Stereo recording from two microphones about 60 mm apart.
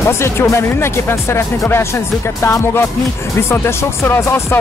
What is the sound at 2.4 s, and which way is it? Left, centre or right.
Speech, left.